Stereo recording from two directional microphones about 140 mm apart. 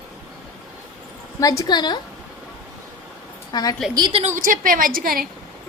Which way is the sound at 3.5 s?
30° left (ahead or behind).